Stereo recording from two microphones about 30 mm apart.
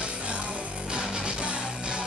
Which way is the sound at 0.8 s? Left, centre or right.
Right.